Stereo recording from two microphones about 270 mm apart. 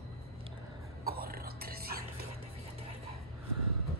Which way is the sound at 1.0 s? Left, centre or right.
Right.